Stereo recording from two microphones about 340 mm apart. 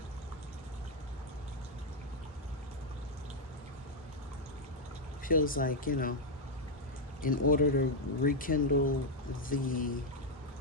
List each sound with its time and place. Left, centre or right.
5.2 s speech: left
7.2 s speech: left